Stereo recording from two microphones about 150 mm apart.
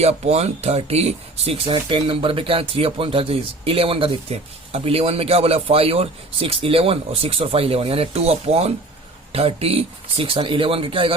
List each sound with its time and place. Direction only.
0.0 s speech: 45° right (ahead or behind)